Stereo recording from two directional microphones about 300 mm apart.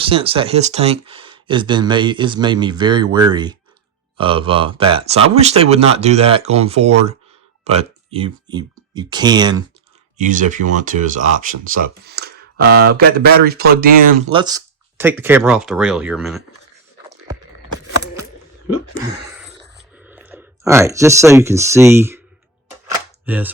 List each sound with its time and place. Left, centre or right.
0.1 s speech: centre
10.2 s speech: right
14.3 s speech: centre
20.0 s speech: centre
22.9 s a sound: centre